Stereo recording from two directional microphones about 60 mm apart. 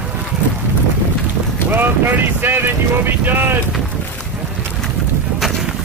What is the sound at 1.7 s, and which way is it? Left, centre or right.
Speech, right.